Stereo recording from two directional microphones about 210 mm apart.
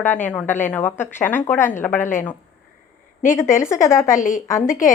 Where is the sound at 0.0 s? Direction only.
10° left (ahead or behind).